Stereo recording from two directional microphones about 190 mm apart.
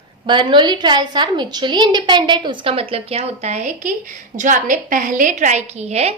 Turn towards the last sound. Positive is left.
turn(degrees=-35)  # may be behind; listen again after turning